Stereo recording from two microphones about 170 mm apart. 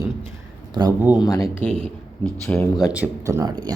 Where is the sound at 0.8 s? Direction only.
25° right (ahead or behind).